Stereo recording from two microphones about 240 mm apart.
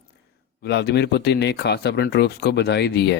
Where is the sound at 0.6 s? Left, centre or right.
Left.